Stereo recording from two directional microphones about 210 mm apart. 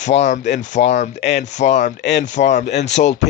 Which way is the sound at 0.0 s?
35° left (ahead or behind).